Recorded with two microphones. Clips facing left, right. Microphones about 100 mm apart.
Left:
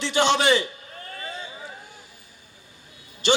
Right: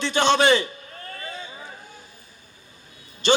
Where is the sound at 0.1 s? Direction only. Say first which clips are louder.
Right 2 dB; 15° left (ahead or behind).